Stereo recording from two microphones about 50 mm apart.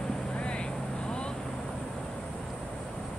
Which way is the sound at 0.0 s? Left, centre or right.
Centre.